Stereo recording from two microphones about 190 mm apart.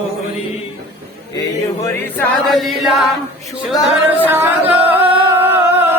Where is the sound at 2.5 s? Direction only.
Centre (ahead or behind).